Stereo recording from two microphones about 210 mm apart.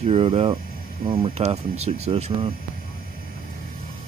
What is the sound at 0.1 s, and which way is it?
Speech, 30° right (ahead or behind).